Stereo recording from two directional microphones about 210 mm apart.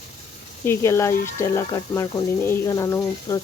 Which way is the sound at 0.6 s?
15° left (ahead or behind).